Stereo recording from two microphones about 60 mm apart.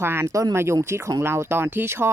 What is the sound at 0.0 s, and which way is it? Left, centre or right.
Speech, right.